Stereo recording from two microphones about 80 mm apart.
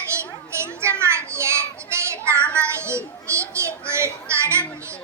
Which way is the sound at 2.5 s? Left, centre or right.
Right.